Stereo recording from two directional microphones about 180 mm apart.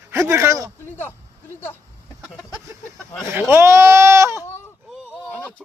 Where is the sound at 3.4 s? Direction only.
15° right (ahead or behind).